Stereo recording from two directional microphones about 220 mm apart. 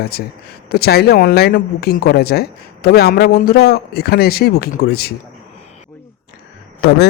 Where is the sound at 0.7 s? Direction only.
45° left (ahead or behind).